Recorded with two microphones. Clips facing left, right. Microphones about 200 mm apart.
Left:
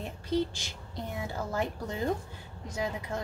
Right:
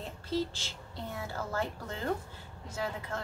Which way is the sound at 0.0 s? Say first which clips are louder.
Left 3 dB; 15° left (ahead or behind).